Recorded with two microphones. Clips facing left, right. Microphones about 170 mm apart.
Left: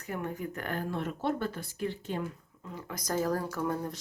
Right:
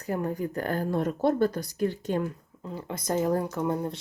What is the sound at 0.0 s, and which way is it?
Speech, 35° right (ahead or behind).